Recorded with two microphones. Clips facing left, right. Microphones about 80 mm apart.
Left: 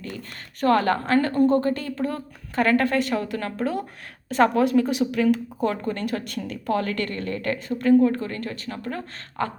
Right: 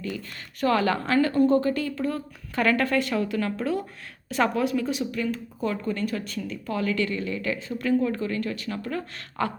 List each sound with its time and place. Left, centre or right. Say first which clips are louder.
0.0 s a woman's voice: right 2 dB; left
2.6 s speech: left 3 dB; left
2.9 s a woman's voice: left 1 dB; left
5.5 s a woman's voice: left 2 dB; left
7.8 s speech: left 7 dB; left